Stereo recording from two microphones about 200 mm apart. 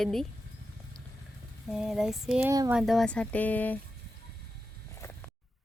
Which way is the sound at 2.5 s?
15° right (ahead or behind).